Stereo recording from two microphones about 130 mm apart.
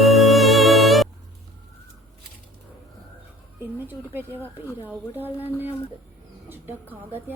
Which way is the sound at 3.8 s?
15° right (ahead or behind).